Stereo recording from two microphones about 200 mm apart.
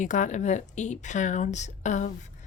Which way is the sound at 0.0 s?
40° left (ahead or behind).